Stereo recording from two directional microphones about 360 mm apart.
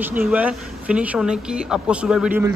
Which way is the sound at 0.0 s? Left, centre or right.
Centre.